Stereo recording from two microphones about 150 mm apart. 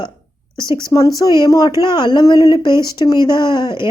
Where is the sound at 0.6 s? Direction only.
30° left (ahead or behind).